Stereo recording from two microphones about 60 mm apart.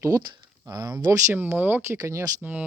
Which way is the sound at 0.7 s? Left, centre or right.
Right.